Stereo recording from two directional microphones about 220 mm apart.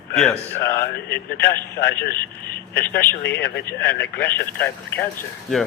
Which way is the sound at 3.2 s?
50° left (ahead or behind).